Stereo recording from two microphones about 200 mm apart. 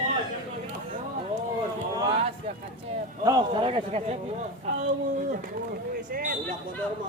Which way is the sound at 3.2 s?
20° right (ahead or behind).